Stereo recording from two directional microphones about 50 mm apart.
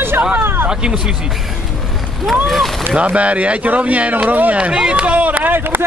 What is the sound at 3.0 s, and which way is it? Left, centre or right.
Speech, right.